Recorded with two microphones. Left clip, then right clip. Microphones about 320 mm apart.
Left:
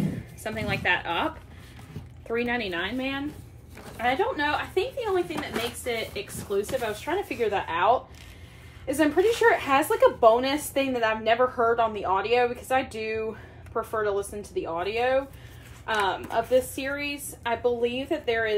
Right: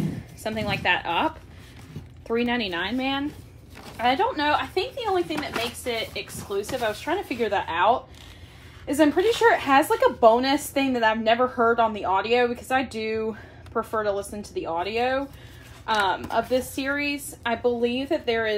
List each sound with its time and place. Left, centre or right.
0.4 s speech: right
5.3 s speech: centre
6.7 s speech: right